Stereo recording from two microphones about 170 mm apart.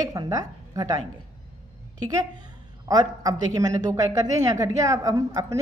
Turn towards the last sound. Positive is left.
turn(degrees=-20)  # may be behind; listen again after turning